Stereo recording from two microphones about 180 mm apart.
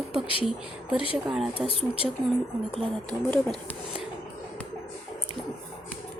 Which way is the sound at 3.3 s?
10° left (ahead or behind).